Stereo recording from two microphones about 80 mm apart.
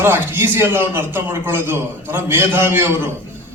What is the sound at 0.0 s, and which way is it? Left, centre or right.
A man's voice, right.